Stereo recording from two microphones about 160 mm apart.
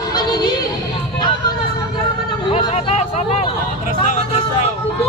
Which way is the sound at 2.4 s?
35° left (ahead or behind).